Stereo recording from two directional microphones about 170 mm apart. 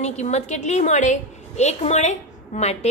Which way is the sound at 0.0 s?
40° left (ahead or behind).